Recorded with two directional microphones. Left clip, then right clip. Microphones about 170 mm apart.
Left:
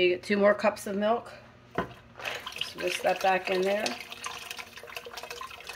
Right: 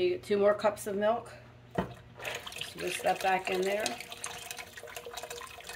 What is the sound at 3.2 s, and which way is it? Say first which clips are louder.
Speech: left 4 dB; 25° left (ahead or behind).